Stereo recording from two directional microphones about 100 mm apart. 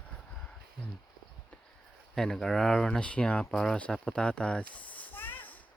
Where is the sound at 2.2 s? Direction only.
5° left (ahead or behind).